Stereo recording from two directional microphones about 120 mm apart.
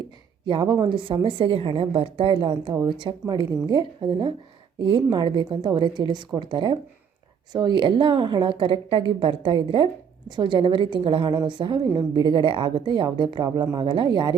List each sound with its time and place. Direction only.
0.4 s a woman's voice: 40° right (ahead or behind)